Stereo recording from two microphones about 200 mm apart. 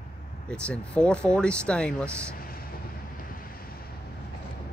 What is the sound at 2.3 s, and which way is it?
Vehicle, 50° left (ahead or behind).